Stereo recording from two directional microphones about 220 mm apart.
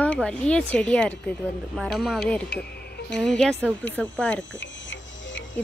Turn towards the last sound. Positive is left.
turn(degrees=55)  # may be behind; listen again after turning